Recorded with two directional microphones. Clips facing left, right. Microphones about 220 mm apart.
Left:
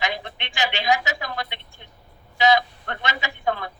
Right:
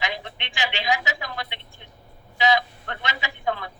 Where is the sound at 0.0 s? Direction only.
45° left (ahead or behind).